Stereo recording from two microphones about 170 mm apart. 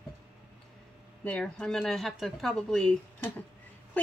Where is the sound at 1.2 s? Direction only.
5° left (ahead or behind).